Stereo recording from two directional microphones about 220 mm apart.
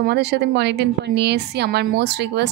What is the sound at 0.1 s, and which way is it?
A woman's voice, 50° right (ahead or behind).